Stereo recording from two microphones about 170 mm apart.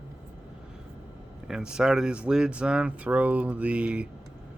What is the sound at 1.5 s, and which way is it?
Speech, 5° right (ahead or behind).